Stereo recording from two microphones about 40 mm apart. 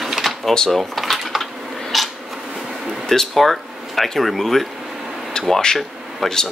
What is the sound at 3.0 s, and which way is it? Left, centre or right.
Speech, centre.